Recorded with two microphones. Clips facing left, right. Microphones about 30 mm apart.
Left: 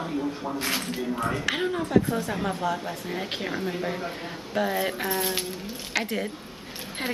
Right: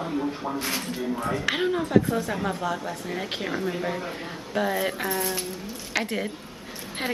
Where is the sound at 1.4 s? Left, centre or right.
Centre.